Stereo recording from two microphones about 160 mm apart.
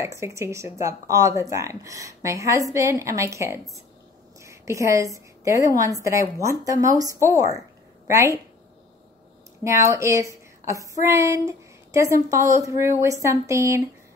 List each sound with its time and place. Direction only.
0.0 s a woman's voice: 20° right (ahead or behind)
9.6 s speech: 20° right (ahead or behind)